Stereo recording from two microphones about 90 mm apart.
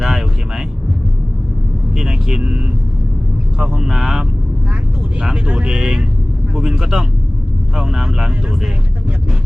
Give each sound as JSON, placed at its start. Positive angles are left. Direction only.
{"t": 0.0, "sound": "vehicle", "side_deg": -5}
{"t": 2.0, "sound": "vehicle", "side_deg": -5}
{"t": 3.6, "sound": "speech", "side_deg": -5}